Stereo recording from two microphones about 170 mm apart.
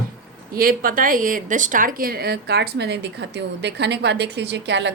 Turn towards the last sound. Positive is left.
turn(degrees=-90)